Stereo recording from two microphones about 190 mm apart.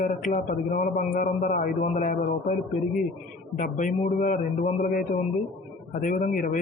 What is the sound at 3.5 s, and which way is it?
Speech, 40° left (ahead or behind).